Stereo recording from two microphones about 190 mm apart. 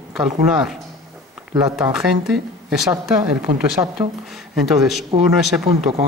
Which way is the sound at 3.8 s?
20° right (ahead or behind).